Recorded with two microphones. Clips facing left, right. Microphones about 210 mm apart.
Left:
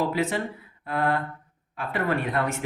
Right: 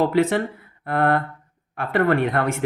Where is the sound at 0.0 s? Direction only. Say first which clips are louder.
Right 7 dB; 60° right (ahead or behind).